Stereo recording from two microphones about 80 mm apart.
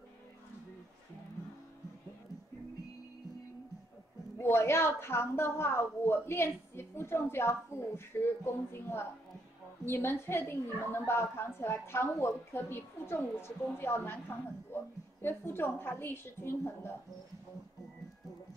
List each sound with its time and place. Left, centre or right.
4.4 s a woman's voice: left